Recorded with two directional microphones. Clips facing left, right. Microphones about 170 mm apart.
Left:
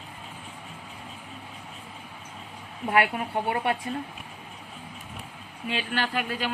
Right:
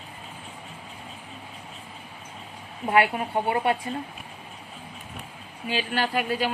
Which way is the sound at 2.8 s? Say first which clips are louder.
Right 2 dB; 25° right (ahead or behind).